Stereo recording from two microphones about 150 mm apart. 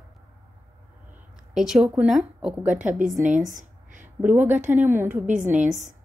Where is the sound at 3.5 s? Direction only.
60° right (ahead or behind).